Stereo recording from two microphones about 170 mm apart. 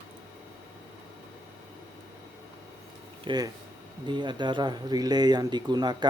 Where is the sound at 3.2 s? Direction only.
25° right (ahead or behind).